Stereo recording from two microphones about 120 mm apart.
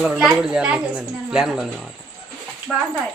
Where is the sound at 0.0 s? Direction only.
Centre (ahead or behind).